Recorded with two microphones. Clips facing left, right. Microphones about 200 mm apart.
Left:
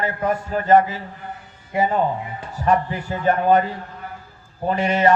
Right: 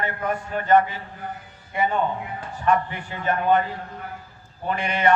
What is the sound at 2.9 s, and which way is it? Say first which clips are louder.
Speech: left 6 dB; 35° left (ahead or behind).